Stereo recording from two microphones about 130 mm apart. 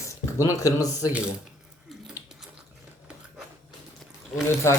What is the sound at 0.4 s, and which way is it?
Speech, 25° left (ahead or behind).